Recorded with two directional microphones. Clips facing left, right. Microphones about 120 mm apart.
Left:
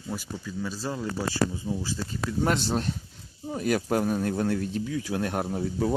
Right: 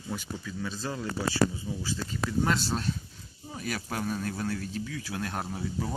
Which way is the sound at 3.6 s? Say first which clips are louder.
Left 10 dB; 50° left (ahead or behind).